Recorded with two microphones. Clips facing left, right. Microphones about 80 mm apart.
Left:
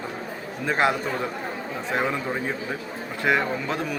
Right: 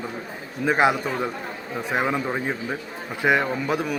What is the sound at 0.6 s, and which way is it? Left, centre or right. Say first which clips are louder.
A man's voice: right 3 dB; centre.